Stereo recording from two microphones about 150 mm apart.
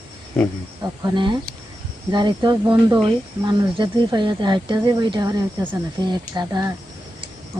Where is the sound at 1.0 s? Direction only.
30° right (ahead or behind).